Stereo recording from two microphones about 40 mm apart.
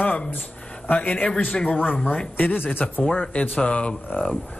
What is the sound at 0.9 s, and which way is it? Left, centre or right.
A man's voice, left.